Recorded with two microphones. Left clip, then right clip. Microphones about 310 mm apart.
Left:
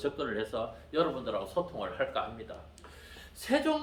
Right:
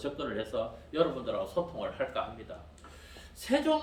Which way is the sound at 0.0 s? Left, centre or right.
Centre.